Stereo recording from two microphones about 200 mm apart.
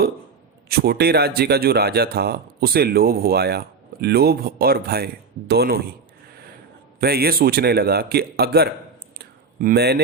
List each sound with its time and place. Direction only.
0.7 s speech: 50° right (ahead or behind)
7.0 s speech: 50° right (ahead or behind)
9.1 s a sound: 50° right (ahead or behind)